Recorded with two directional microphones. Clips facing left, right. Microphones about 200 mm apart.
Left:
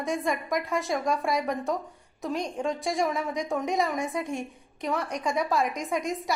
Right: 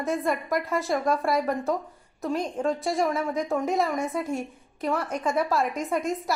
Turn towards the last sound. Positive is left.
turn(degrees=0)  # may be behind; listen again after turning